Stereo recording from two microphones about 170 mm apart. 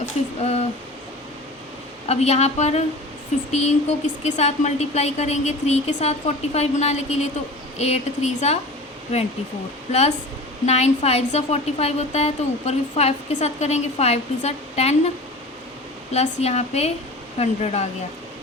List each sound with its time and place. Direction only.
2.0 s a woman's voice: 40° left (ahead or behind)
16.1 s a woman's voice: 40° left (ahead or behind)